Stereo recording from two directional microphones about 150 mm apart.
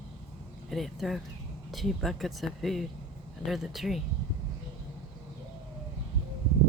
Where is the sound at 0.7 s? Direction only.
Centre (ahead or behind).